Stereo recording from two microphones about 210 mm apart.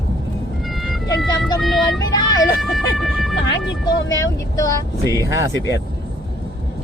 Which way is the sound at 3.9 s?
15° left (ahead or behind).